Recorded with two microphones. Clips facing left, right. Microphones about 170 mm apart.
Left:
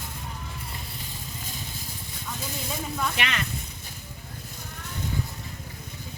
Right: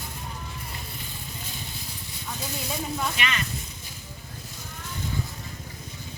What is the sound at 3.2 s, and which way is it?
Speech, 70° left (ahead or behind).